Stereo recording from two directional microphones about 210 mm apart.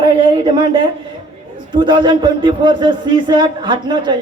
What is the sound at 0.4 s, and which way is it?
A man's voice, 25° right (ahead or behind).